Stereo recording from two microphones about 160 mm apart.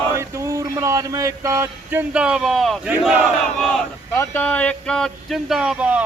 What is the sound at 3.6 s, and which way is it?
Speech, centre (ahead or behind).